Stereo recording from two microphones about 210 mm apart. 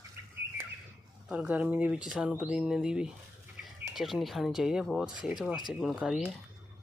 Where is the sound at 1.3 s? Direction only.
5° right (ahead or behind).